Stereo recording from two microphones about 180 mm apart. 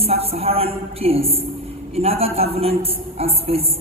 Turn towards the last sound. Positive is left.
turn(degrees=-35)  # may be behind; listen again after turning